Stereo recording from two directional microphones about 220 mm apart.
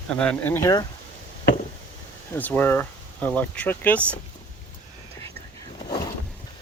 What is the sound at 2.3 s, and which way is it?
Speech, 10° left (ahead or behind).